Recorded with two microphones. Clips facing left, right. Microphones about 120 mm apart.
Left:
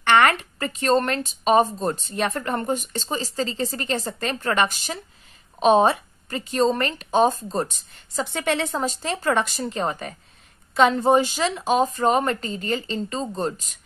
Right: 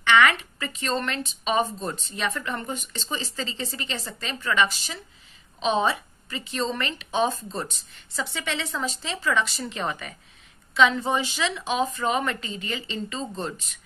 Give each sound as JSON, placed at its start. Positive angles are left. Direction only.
{"t": 0.0, "sound": "speech", "side_deg": 50}